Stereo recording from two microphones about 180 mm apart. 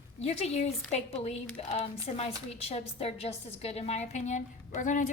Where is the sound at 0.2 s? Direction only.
35° left (ahead or behind).